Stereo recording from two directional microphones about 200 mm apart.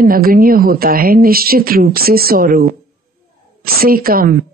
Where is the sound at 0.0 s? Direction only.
45° right (ahead or behind).